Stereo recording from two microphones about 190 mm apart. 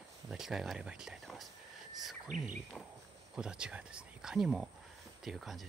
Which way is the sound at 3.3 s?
5° right (ahead or behind).